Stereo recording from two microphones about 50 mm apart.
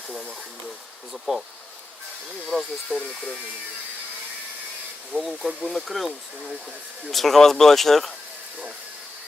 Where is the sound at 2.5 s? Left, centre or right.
Centre.